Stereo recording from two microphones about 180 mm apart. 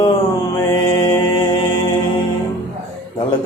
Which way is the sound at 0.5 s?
20° left (ahead or behind).